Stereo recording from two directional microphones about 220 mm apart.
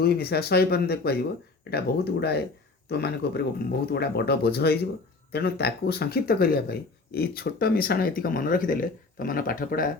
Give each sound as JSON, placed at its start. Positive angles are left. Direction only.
{"t": 0.0, "sound": "speech", "side_deg": 45}